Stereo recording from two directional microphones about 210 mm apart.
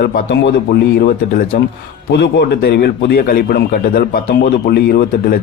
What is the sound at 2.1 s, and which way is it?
A man's voice, 50° left (ahead or behind).